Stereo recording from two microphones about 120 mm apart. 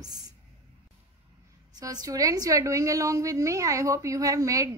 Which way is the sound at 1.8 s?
30° right (ahead or behind).